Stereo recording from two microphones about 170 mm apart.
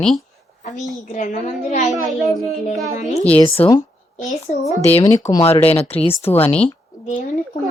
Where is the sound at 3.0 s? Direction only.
45° left (ahead or behind).